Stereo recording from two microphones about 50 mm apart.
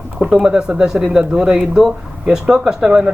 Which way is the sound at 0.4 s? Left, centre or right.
Centre.